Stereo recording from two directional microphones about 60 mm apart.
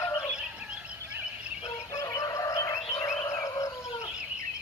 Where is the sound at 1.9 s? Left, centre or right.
Left.